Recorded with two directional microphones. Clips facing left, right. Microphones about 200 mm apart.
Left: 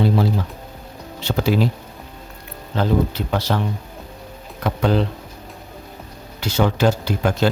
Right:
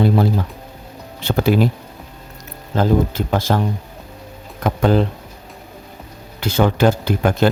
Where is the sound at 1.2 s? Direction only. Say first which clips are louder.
Right 3 dB; 55° right (ahead or behind).